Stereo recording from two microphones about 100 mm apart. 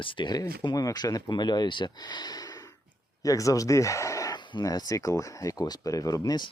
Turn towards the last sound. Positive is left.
turn(degrees=50)  # may be behind; listen again after turning